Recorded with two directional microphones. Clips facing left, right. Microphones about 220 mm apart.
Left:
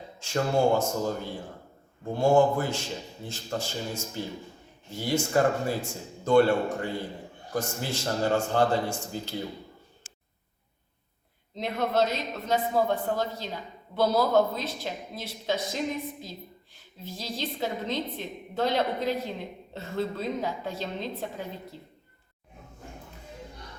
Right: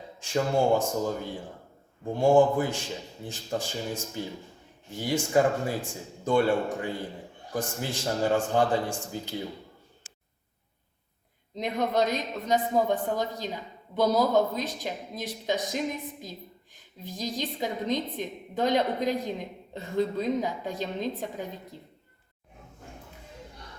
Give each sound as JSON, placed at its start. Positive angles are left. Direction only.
{"t": 0.8, "sound": "a woman's voice", "side_deg": -15}
{"t": 11.5, "sound": "a woman's voice", "side_deg": -15}